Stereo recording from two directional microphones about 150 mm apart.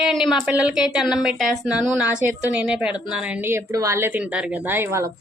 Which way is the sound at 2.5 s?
5° right (ahead or behind).